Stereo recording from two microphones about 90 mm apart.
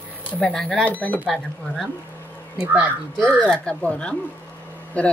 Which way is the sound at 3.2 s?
10° left (ahead or behind).